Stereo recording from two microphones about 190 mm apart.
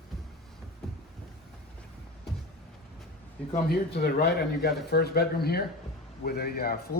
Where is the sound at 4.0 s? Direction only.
55° left (ahead or behind).